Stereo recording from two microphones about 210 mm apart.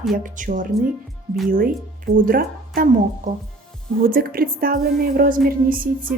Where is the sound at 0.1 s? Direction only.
40° right (ahead or behind).